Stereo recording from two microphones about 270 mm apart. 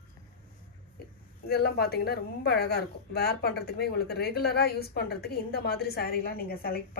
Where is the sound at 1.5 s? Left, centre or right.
Left.